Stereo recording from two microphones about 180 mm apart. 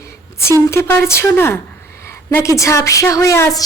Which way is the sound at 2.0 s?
15° left (ahead or behind).